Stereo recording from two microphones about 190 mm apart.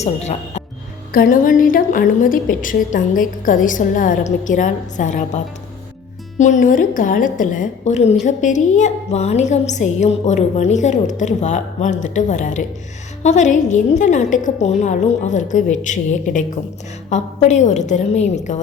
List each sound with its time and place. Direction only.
0.0 s a woman's voice: 35° left (ahead or behind)
1.1 s a woman's voice: 45° left (ahead or behind)
6.4 s a woman's voice: 40° left (ahead or behind)